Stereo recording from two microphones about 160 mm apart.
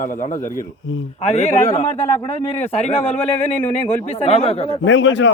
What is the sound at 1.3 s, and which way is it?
A man's voice, 40° left (ahead or behind).